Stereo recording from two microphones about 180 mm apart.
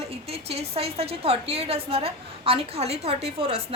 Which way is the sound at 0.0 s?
35° right (ahead or behind).